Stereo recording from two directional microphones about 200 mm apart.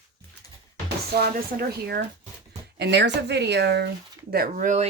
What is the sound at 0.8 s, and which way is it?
Chopping, 50° right (ahead or behind).